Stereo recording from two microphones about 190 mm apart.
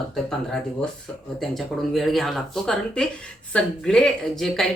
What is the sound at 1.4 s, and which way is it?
Speech, centre (ahead or behind).